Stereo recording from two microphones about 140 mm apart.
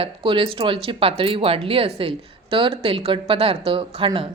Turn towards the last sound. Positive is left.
turn(degrees=-35)  # may be behind; listen again after turning